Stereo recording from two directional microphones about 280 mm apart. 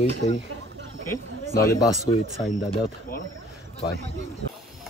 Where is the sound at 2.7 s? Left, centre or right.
Left.